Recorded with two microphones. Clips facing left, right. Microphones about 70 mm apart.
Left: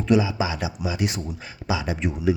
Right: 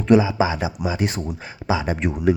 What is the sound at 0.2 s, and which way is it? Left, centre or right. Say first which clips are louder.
Speech: right 4 dB; right.